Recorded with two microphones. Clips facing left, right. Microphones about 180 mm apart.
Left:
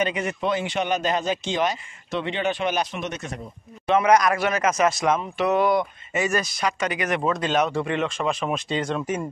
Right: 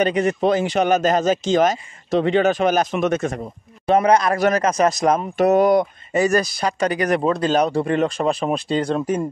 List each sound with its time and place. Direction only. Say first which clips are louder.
0.0 s speech: right 7 dB; 40° right (ahead or behind)
3.8 s speech: right 3 dB; 35° right (ahead or behind)